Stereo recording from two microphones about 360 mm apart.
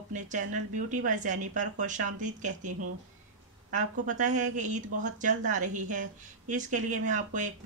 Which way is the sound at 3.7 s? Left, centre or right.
Right.